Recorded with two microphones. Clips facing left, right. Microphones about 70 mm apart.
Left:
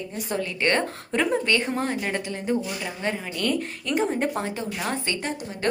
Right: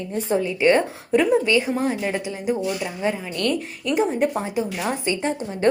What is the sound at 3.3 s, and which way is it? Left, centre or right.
A woman's voice, centre.